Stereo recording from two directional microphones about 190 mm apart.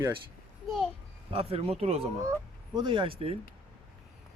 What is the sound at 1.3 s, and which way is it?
Speech, 30° right (ahead or behind).